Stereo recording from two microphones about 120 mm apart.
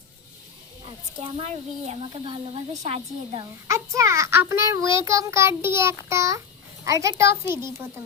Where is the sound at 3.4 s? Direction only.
25° right (ahead or behind).